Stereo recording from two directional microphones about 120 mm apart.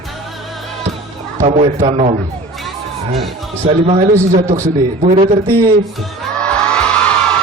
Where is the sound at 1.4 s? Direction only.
65° right (ahead or behind).